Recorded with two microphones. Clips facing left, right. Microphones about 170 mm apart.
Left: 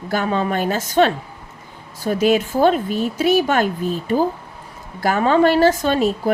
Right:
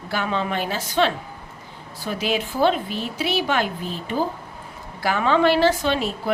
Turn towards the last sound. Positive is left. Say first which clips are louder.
# left 4 dB
turn(degrees=45)  # may be behind; listen again after turning